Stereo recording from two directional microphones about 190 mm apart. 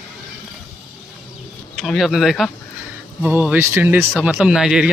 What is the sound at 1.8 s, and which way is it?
Speech, centre (ahead or behind).